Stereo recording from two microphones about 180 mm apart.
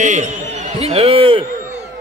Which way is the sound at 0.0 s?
40° right (ahead or behind).